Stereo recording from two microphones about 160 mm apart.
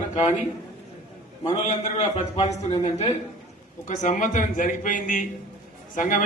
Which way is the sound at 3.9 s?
55° left (ahead or behind).